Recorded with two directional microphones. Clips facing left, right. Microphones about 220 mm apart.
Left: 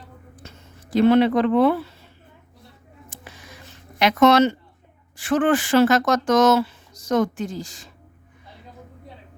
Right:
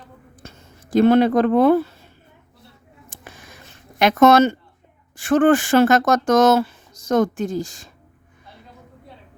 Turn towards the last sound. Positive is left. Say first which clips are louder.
# right 5 dB
turn(degrees=-45)  # may be behind; listen again after turning